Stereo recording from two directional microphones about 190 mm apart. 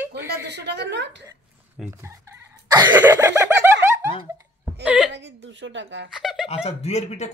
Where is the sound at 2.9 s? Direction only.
10° right (ahead or behind).